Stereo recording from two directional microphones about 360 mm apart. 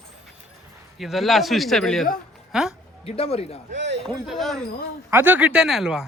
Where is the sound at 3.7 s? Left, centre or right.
Right.